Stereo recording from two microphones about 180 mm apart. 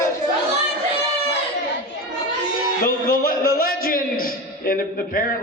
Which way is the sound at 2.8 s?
55° left (ahead or behind).